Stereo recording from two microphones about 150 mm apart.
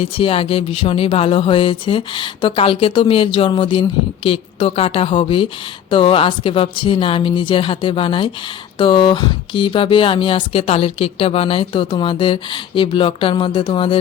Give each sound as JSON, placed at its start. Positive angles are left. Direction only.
{"t": 0.0, "sound": "speech", "side_deg": 40}